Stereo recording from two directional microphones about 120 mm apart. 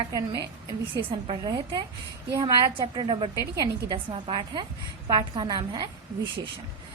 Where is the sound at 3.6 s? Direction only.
35° right (ahead or behind).